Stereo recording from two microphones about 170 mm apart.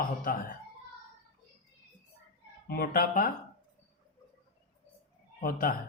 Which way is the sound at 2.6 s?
60° left (ahead or behind).